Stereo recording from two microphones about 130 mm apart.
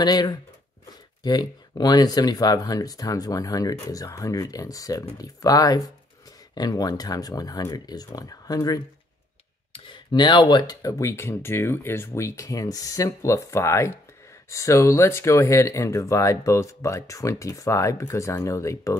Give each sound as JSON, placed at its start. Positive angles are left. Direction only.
{"t": 0.0, "sound": "speech", "side_deg": 30}
{"t": 9.7, "sound": "speech", "side_deg": 40}